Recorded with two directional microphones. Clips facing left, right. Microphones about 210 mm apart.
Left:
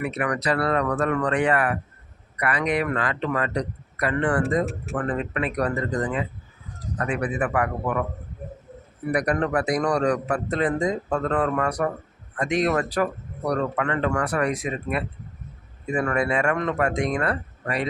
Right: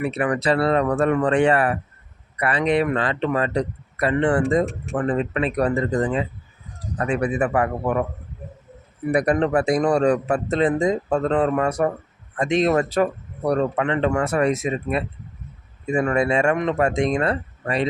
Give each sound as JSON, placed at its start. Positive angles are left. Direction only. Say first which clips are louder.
{"t": 0.0, "sound": "a man's voice", "louder": "right 4 dB", "side_deg": -30}
{"t": 4.6, "sound": "speech", "louder": "right 2 dB", "side_deg": 5}
{"t": 4.9, "sound": "a man's voice", "louder": "right 5 dB", "side_deg": -25}
{"t": 9.0, "sound": "a man's voice", "louder": "right 4 dB", "side_deg": -25}